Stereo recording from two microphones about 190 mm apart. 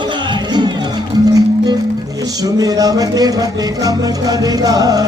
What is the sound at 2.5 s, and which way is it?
Music, 20° right (ahead or behind).